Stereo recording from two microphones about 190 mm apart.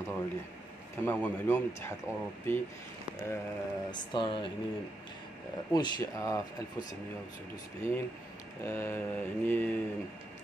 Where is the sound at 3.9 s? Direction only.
25° left (ahead or behind).